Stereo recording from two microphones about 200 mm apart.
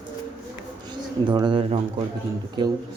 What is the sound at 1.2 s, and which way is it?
Speech, 20° right (ahead or behind).